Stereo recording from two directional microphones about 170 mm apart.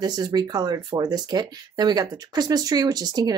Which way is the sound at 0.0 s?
25° right (ahead or behind).